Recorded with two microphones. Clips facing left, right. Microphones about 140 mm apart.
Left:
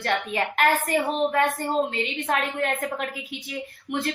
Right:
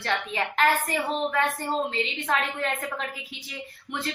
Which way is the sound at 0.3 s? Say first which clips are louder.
Even; 50° left (ahead or behind).